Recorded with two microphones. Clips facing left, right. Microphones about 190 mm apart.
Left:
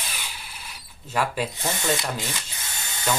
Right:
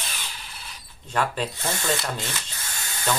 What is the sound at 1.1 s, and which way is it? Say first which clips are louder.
Speech: even; 10° left (ahead or behind).